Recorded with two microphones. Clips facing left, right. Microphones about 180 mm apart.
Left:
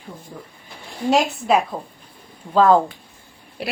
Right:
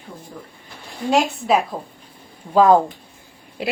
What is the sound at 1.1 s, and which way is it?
Speech, centre (ahead or behind).